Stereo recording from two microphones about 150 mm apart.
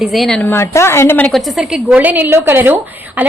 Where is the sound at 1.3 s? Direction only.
Centre (ahead or behind).